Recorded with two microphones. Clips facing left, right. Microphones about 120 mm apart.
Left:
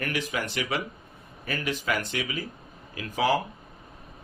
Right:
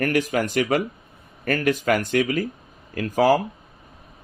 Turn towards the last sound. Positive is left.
turn(degrees=-40)  # may be behind; listen again after turning